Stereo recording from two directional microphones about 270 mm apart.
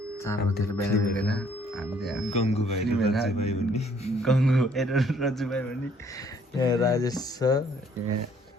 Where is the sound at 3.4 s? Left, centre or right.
Left.